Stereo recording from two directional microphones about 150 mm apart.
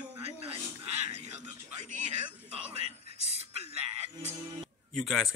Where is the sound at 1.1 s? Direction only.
50° right (ahead or behind).